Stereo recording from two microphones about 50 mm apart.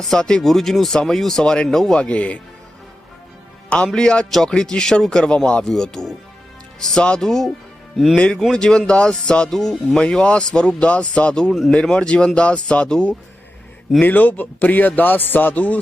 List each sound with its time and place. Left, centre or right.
0.2 s speech: centre
2.0 s speech: left
3.9 s speech: centre
7.2 s speech: centre
8.1 s speech: left
14.0 s a man's voice: left